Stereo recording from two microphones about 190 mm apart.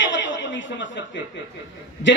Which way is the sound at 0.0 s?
75° left (ahead or behind).